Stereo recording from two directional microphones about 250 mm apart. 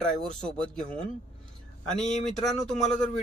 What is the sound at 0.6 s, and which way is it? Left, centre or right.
Speech, centre.